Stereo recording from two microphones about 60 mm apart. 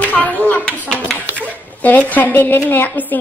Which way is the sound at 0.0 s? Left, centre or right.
Left.